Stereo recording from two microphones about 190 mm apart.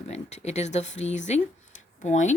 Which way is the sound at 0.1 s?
35° left (ahead or behind).